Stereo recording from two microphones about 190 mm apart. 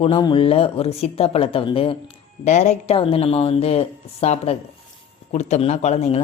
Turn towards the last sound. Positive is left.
turn(degrees=35)  # may be behind; listen again after turning